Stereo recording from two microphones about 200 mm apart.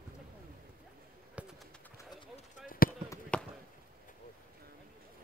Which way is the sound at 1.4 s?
5° right (ahead or behind).